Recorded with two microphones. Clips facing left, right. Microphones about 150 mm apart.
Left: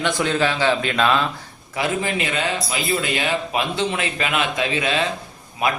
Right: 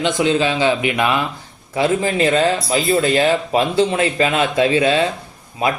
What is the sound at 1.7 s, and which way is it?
A man's voice, 30° right (ahead or behind).